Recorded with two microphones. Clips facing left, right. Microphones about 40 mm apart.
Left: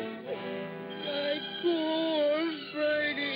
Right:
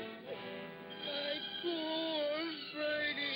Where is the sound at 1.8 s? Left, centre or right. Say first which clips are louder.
Left 9 dB; centre.